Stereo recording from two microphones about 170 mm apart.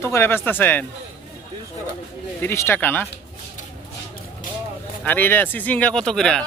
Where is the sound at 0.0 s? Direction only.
15° left (ahead or behind).